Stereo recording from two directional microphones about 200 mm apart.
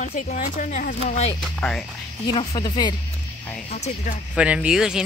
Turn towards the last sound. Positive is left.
turn(degrees=-5)  # may be behind; listen again after turning